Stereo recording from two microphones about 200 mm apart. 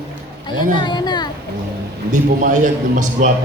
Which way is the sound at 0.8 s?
20° left (ahead or behind).